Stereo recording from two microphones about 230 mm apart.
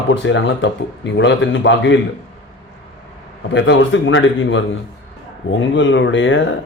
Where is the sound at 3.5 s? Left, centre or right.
Left.